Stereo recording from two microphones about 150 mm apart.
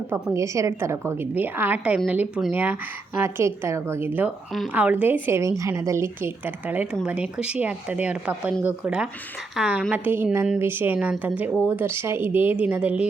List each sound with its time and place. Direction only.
0.3 s a woman's voice: 20° right (ahead or behind)